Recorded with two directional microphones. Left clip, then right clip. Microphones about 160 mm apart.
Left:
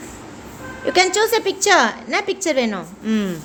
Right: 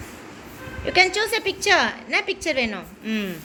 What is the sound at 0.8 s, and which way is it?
A woman's voice, 30° left (ahead or behind).